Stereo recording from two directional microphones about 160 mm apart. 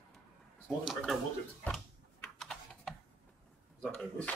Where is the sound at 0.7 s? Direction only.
Centre (ahead or behind).